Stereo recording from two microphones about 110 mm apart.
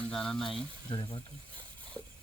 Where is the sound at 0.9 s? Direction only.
50° left (ahead or behind).